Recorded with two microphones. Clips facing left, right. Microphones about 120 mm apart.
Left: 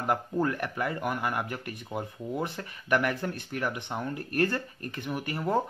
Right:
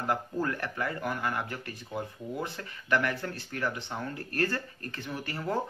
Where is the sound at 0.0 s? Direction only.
20° left (ahead or behind).